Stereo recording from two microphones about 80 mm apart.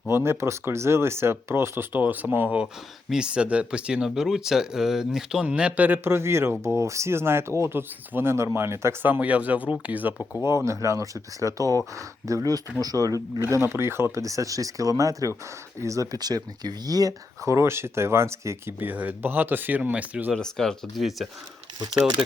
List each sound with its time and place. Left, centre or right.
0.1 s speech: right
3.1 s speech: centre
10.7 s speech: right
13.4 s speech: right
18.8 s speech: right
20.3 s speech: centre